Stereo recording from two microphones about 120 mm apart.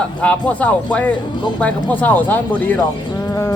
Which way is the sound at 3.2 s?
25° left (ahead or behind).